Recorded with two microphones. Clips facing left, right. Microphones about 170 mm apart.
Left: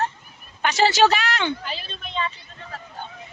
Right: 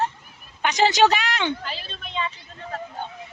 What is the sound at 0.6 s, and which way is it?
Speech, 15° right (ahead or behind).